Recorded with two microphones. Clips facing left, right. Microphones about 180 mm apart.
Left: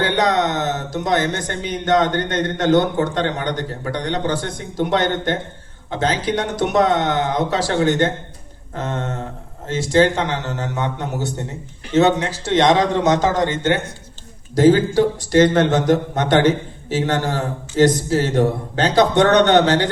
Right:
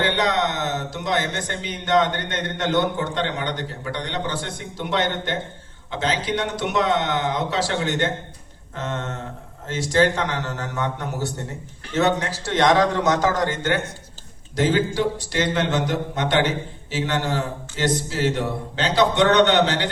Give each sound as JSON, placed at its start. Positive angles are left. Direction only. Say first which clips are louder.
{"t": 0.0, "sound": "a man's voice", "louder": "left 4 dB", "side_deg": 40}
{"t": 14.5, "sound": "a man's voice", "louder": "left 7 dB", "side_deg": 40}